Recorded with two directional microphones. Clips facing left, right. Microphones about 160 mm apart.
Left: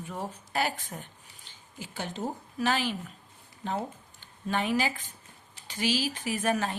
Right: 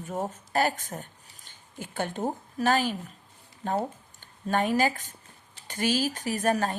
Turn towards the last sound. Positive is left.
turn(degrees=-45)  # may be behind; listen again after turning